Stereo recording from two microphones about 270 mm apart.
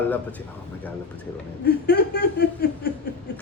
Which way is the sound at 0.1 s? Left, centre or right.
Centre.